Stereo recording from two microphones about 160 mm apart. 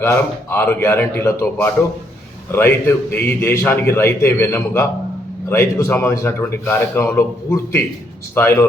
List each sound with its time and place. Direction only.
0.0 s a man's voice: 15° left (ahead or behind)